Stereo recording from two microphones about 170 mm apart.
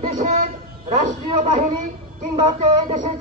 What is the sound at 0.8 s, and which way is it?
Speech, 45° right (ahead or behind).